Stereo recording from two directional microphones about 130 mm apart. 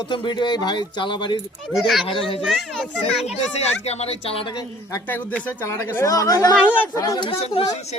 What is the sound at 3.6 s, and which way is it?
Speech, 55° left (ahead or behind).